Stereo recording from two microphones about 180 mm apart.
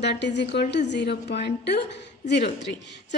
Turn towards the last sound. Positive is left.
turn(degrees=75)  # may be behind; listen again after turning